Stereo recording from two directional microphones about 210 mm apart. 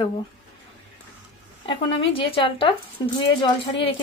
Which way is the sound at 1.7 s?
25° left (ahead or behind).